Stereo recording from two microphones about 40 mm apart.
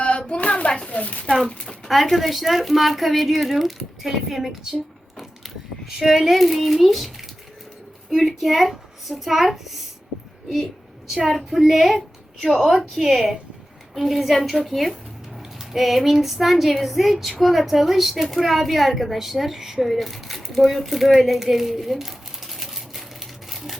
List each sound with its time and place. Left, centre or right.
0.0 s hands: left
0.9 s speech: left
1.9 s speech: centre
6.0 s speech: centre
8.1 s speech: centre
11.1 s speech: centre
19.9 s a sound: centre